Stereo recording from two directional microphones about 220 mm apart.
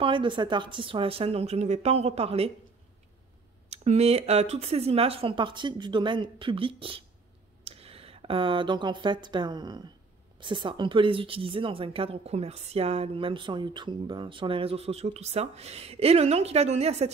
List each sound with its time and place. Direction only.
0.0 s a woman's voice: 20° right (ahead or behind)
3.7 s a woman's voice: 30° right (ahead or behind)